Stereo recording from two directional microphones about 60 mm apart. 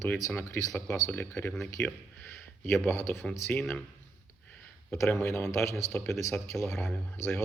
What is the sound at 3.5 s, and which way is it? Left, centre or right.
Speech, left.